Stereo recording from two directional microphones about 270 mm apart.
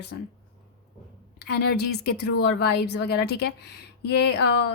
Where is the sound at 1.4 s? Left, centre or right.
Left.